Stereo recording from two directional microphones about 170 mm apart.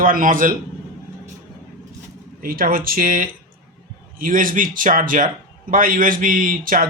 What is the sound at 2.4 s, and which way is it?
A man's voice, 55° right (ahead or behind).